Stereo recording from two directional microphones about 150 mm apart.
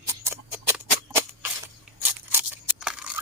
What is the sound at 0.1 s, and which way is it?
Rodents, 15° right (ahead or behind).